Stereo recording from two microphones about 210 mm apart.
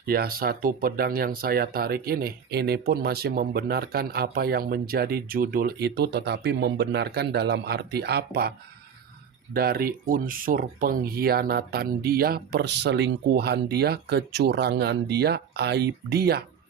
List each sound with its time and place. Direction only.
0.0 s speech: 45° right (ahead or behind)